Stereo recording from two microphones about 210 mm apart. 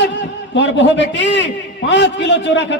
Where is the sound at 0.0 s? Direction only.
55° left (ahead or behind).